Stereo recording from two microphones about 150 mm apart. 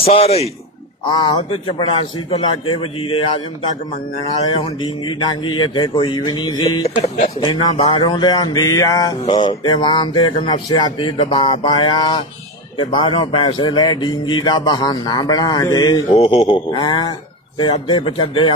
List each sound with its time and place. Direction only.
0.0 s speech: 45° left (ahead or behind)
4.3 s speech: 35° left (ahead or behind)
9.2 s speech: 35° left (ahead or behind)